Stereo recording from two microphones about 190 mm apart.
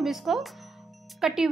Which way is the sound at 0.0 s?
Centre (ahead or behind).